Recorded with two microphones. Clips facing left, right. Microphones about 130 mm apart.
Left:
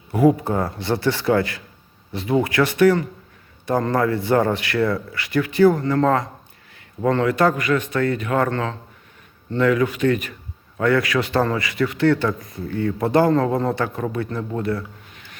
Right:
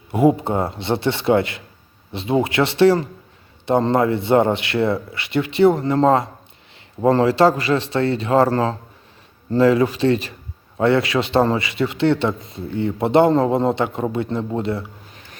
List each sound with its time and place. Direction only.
0.1 s a man's voice: 25° right (ahead or behind)